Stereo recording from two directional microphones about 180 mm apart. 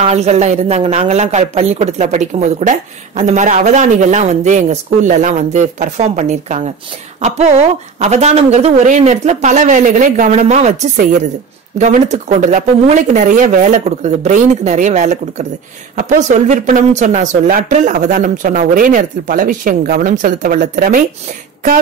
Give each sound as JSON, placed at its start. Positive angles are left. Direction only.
{"t": 0.0, "sound": "speech", "side_deg": -35}